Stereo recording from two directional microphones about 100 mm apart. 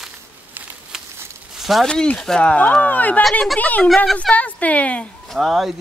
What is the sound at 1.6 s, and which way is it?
Speech, centre (ahead or behind).